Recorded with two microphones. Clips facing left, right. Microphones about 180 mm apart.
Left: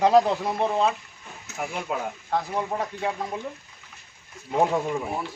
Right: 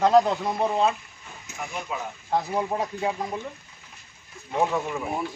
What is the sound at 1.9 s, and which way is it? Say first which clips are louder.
Speech: left 4 dB; 55° left (ahead or behind).